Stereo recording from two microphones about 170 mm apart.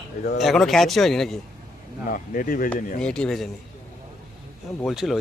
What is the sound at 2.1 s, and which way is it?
Speech, 55° left (ahead or behind).